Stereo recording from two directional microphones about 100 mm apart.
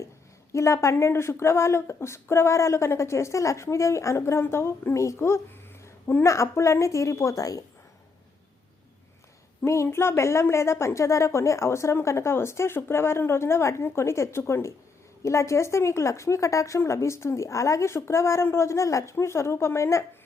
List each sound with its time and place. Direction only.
0.5 s a woman's voice: 30° left (ahead or behind)
9.6 s a woman's voice: 30° left (ahead or behind)